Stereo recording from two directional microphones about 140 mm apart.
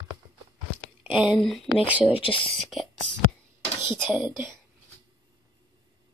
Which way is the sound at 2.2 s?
40° left (ahead or behind).